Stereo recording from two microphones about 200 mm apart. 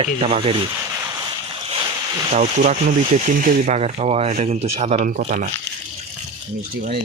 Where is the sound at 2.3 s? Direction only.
35° right (ahead or behind).